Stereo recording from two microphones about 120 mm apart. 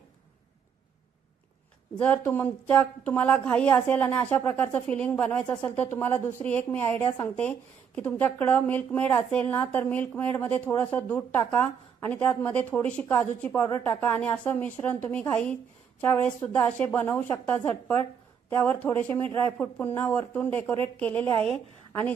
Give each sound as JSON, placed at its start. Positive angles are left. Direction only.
{"t": 2.0, "sound": "a woman's voice", "side_deg": 10}